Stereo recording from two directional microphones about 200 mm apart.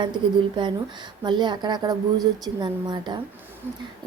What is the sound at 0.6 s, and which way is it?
A woman's voice, 25° right (ahead or behind).